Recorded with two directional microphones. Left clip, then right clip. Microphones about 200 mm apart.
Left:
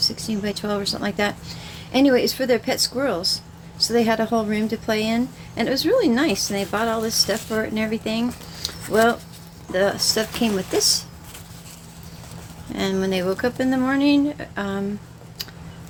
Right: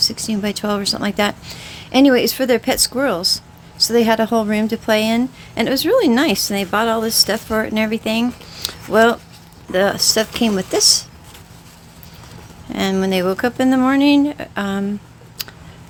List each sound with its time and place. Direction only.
0.0 s speech: 40° right (ahead or behind)
12.7 s speech: 35° right (ahead or behind)
15.4 s tick: 40° right (ahead or behind)